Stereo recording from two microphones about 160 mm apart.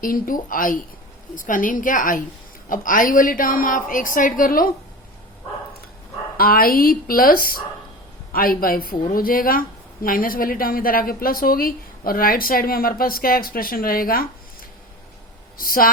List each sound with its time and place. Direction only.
0.0 s a woman's voice: 60° left (ahead or behind)
6.3 s a woman's voice: 65° left (ahead or behind)
15.5 s a woman's voice: 65° left (ahead or behind)